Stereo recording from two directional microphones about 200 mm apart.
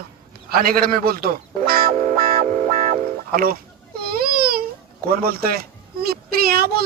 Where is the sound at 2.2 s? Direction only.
45° right (ahead or behind).